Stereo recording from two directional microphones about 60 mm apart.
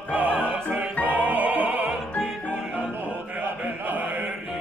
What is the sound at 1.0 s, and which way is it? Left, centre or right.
Music, right.